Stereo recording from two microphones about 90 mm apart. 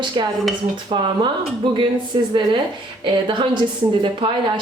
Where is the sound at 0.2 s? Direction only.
70° right (ahead or behind).